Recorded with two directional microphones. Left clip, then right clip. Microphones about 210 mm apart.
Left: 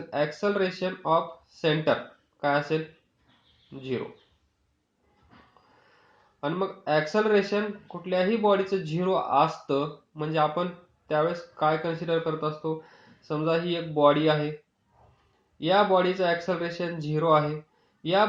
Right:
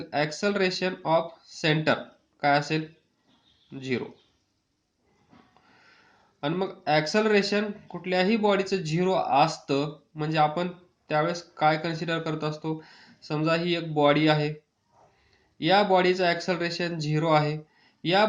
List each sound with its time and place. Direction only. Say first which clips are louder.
0.3 s speech: right 1 dB; 25° right (ahead or behind)
3.8 s speech: right 1 dB; 25° right (ahead or behind)
6.4 s speech: even; 25° right (ahead or behind)
15.5 s speech: right 1 dB; 25° right (ahead or behind)